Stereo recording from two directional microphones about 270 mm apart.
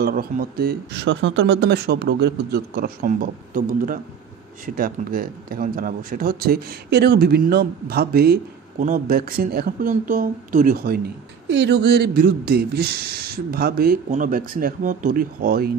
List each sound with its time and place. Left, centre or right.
0.0 s speech: right